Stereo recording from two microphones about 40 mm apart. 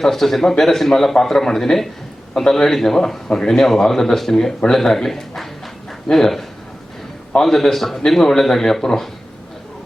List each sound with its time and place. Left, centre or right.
0.0 s a man's voice: centre
7.4 s a man's voice: centre